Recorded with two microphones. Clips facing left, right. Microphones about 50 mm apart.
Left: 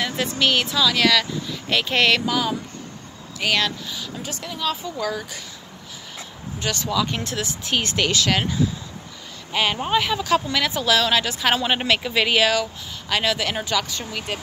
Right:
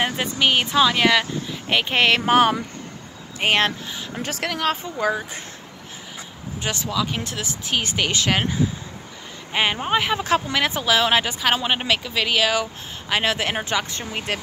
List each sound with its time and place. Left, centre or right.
0.0 s speech: right
2.2 s speech: right
3.3 s speech: right
4.2 s speech: right
4.8 s speech: right
6.6 s speech: right
6.9 s speech: centre
8.1 s speech: right
11.4 s speech: centre
12.0 s speech: centre
13.2 s speech: right